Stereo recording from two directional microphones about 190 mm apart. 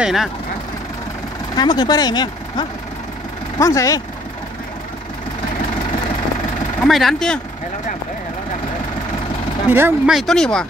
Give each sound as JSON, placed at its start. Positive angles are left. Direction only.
{"t": 0.0, "sound": "speech", "side_deg": 0}
{"t": 1.6, "sound": "speech", "side_deg": 20}
{"t": 6.8, "sound": "speech", "side_deg": 0}
{"t": 9.7, "sound": "speech", "side_deg": -10}